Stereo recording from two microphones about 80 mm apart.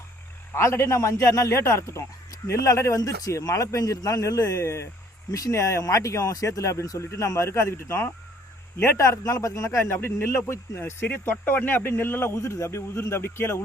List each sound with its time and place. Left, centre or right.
0.5 s speech: left
9.0 s speech: left